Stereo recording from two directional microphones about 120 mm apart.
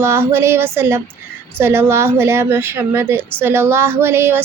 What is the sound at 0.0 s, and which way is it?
A woman's voice, 20° right (ahead or behind).